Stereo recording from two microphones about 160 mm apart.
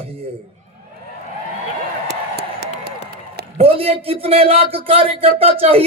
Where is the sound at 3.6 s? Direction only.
40° right (ahead or behind).